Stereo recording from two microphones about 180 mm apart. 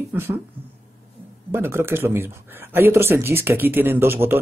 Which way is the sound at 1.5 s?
15° right (ahead or behind).